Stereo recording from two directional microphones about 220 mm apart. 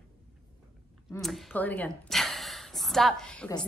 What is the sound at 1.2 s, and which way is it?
A woman's voice, centre (ahead or behind).